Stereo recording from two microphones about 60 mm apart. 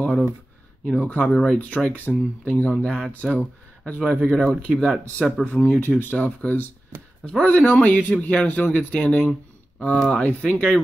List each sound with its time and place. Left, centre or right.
0.8 s speech: left
5.4 s speech: left
7.5 s speech: left
9.9 s speech: centre
10.2 s speech: left